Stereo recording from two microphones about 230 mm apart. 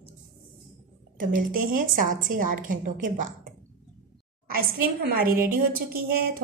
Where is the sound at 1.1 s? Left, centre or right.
Right.